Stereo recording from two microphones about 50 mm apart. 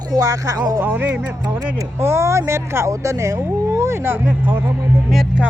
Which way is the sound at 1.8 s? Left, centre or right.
Right.